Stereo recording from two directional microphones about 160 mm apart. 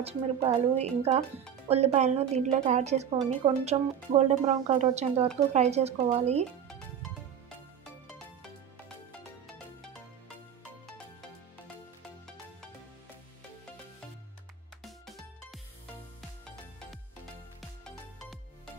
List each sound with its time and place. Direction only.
0.0 s a woman's voice: 35° right (ahead or behind)
14.8 s music: centre (ahead or behind)
17.6 s music: centre (ahead or behind)